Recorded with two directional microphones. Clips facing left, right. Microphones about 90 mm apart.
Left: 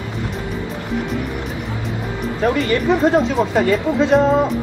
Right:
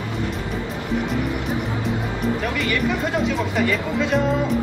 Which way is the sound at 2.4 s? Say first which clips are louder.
Left 6 dB; 35° left (ahead or behind).